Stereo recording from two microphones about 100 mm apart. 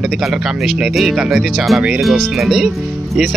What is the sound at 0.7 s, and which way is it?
Speech, centre (ahead or behind).